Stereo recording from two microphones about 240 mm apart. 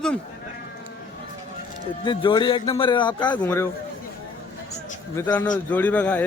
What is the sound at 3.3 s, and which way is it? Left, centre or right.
Speech, centre.